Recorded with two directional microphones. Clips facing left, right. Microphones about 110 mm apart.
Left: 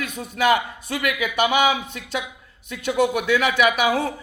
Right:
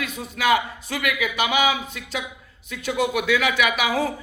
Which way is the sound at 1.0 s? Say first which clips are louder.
Left 2 dB; 40° left (ahead or behind).